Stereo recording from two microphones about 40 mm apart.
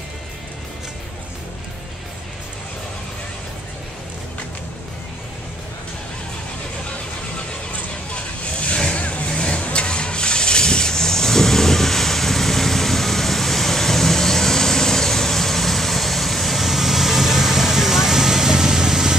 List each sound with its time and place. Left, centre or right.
8.7 s vehicle: centre
9.0 s vehicle: left; by 19.1 s centre